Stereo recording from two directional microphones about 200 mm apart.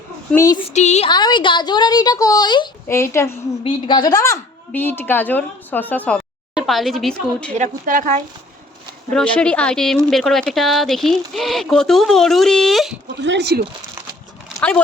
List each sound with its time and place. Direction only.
0.3 s a woman's voice: 15° left (ahead or behind)
0.7 s speech: 35° left (ahead or behind)
1.1 s a woman's voice: 20° left (ahead or behind); by 7.5 s centre (ahead or behind)
7.6 s speech: 40° right (ahead or behind)
9.1 s speech: 5° left (ahead or behind)
13.1 s speech: 60° right (ahead or behind)